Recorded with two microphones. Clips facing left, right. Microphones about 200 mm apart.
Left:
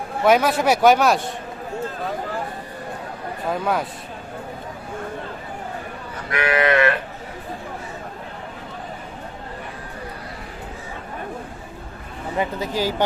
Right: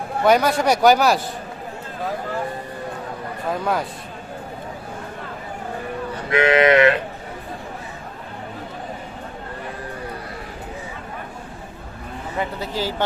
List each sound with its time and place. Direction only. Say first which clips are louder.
0.3 s a man's voice: even; centre (ahead or behind)
3.5 s a man's voice: even; centre (ahead or behind)
6.3 s livestock: right 4 dB; 25° right (ahead or behind)
12.4 s speech: left 2 dB; 15° left (ahead or behind)